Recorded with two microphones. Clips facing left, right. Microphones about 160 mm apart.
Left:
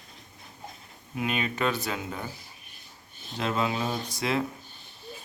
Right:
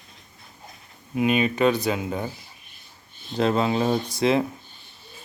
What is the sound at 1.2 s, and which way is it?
Speech, 20° right (ahead or behind).